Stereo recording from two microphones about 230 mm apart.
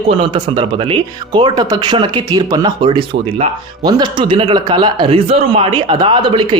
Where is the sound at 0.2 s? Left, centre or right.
Right.